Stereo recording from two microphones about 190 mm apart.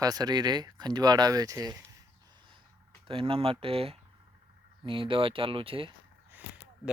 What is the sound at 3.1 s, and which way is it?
Speech, 30° right (ahead or behind).